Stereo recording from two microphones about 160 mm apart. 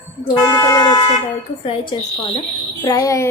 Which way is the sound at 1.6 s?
30° left (ahead or behind).